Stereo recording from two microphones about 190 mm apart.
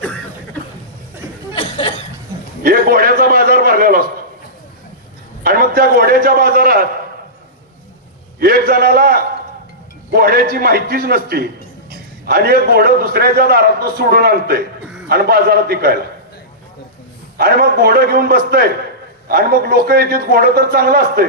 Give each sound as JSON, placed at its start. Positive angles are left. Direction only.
{"t": 1.5, "sound": "chuckle", "side_deg": 25}
{"t": 2.6, "sound": "a sound", "side_deg": -50}
{"t": 5.4, "sound": "a man's voice", "side_deg": -50}
{"t": 8.4, "sound": "a man's voice", "side_deg": -50}
{"t": 17.3, "sound": "a man's voice", "side_deg": -55}